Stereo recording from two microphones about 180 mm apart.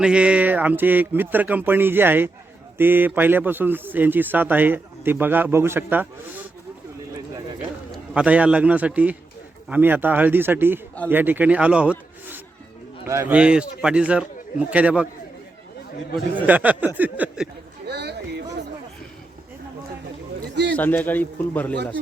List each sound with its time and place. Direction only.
0.0 s speech: 5° right (ahead or behind)
8.1 s a man's voice: 5° right (ahead or behind)
16.1 s speech: 10° right (ahead or behind)
17.8 s a sound: 70° right (ahead or behind)
20.7 s speech: 10° left (ahead or behind)